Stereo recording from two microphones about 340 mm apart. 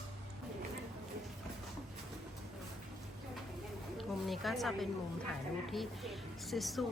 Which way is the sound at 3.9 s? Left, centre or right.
Centre.